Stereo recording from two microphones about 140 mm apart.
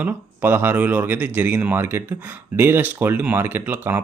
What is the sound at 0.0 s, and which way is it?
A man's voice, 15° right (ahead or behind).